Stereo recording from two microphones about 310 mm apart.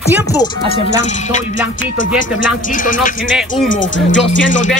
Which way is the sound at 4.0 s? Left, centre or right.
Left.